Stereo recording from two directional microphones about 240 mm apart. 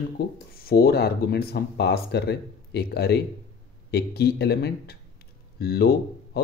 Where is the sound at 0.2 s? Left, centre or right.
Left.